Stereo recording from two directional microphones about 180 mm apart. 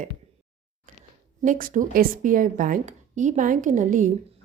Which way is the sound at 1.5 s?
50° right (ahead or behind).